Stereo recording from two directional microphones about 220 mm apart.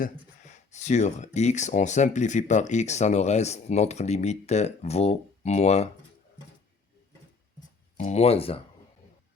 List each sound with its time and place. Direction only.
0.4 s speech: 30° left (ahead or behind)
7.9 s speech: 30° left (ahead or behind)